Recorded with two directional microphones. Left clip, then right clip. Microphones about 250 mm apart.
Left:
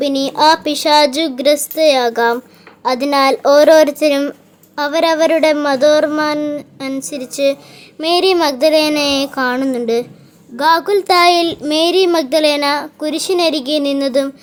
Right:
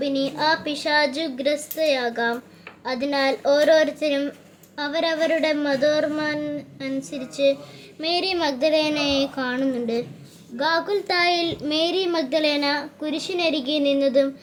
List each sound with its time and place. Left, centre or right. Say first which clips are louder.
0.0 s a woman's voice: left 10 dB; left